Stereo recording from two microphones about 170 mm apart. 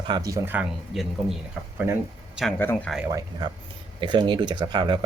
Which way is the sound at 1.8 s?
10° right (ahead or behind).